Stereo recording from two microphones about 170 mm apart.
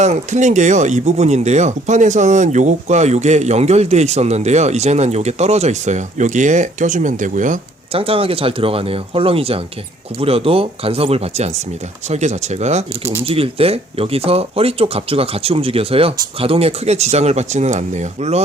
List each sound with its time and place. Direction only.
0.0 s speech: 45° right (ahead or behind)
7.9 s speech: 35° right (ahead or behind)